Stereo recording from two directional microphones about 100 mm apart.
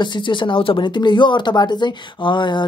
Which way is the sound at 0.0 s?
55° left (ahead or behind).